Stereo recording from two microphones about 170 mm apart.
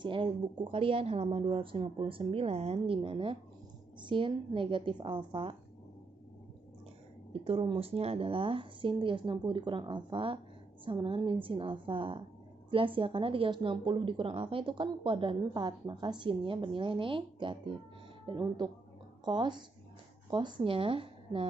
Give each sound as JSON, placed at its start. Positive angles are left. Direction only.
{"t": 0.0, "sound": "a woman's voice", "side_deg": -30}
{"t": 7.4, "sound": "a woman's voice", "side_deg": -35}